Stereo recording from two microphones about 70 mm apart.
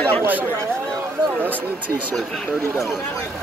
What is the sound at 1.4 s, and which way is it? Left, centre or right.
Speech, right.